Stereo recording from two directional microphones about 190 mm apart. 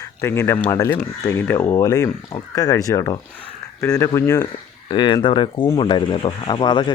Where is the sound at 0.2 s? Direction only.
10° left (ahead or behind).